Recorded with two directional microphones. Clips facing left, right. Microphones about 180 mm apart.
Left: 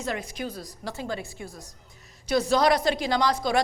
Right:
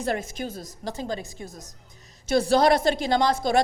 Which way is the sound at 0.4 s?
20° right (ahead or behind).